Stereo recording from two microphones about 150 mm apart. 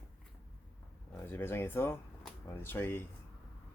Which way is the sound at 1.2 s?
15° left (ahead or behind).